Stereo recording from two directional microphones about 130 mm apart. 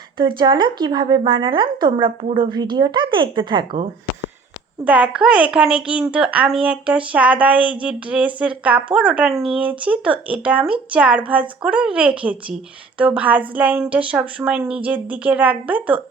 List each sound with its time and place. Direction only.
0.2 s speech: 35° right (ahead or behind)
4.9 s a woman's voice: 10° right (ahead or behind)